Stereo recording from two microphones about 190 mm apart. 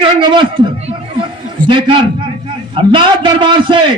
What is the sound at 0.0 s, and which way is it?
A man's voice, 25° right (ahead or behind).